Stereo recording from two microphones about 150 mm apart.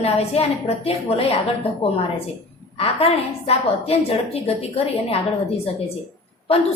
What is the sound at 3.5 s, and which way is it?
A woman's voice, 40° left (ahead or behind).